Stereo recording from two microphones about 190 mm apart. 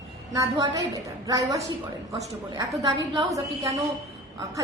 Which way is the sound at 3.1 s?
20° right (ahead or behind).